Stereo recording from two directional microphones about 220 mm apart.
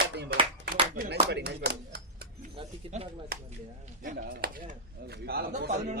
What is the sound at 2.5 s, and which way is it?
Speech, 30° right (ahead or behind).